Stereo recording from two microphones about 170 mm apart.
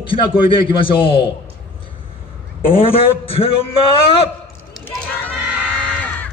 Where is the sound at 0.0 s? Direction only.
30° left (ahead or behind).